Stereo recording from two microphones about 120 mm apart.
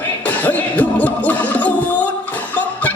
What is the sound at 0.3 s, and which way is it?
Music, 15° left (ahead or behind).